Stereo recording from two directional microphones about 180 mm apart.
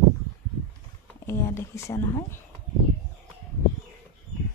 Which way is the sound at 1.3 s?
15° left (ahead or behind).